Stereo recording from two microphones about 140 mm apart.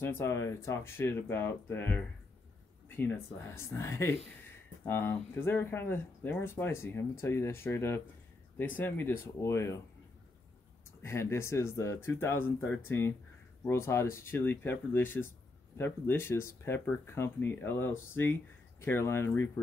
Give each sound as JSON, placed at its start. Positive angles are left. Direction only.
{"t": 0.0, "sound": "speech", "side_deg": 15}
{"t": 3.5, "sound": "speech", "side_deg": 20}
{"t": 11.0, "sound": "speech", "side_deg": 20}